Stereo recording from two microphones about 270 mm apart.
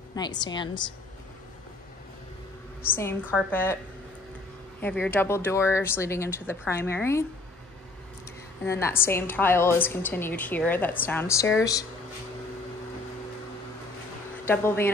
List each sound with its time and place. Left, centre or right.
0.1 s a woman's voice: centre
2.9 s a woman's voice: centre
4.7 s a woman's voice: centre
8.6 s a woman's voice: centre
14.4 s speech: centre